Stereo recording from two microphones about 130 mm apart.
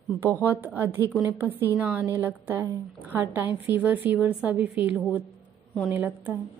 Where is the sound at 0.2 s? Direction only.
15° right (ahead or behind).